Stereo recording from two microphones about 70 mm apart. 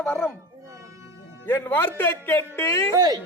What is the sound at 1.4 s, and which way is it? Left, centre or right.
A man's voice, left.